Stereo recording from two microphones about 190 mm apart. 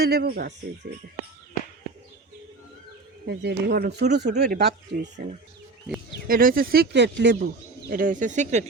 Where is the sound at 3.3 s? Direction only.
60° right (ahead or behind).